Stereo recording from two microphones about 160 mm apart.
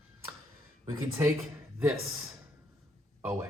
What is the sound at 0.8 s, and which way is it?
Speech, 20° right (ahead or behind).